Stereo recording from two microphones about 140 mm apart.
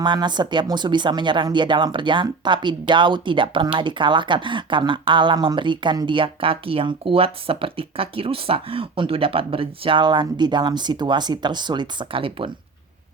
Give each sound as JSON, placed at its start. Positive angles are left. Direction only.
{"t": 0.0, "sound": "speech", "side_deg": -30}